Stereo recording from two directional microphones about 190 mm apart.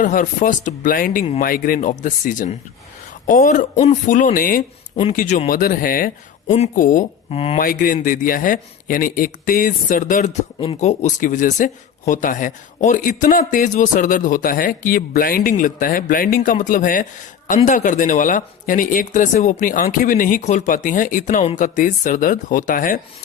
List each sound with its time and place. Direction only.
0.0 s speech: 45° left (ahead or behind)
7.6 s speech: 45° left (ahead or behind)